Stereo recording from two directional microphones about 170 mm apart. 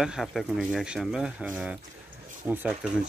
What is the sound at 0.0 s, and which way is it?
Speech, centre (ahead or behind).